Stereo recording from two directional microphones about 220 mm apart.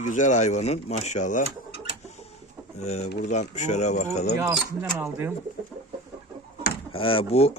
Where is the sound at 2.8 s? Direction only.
30° left (ahead or behind).